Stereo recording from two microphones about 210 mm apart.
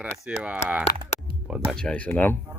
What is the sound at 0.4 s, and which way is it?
Speech, 5° right (ahead or behind).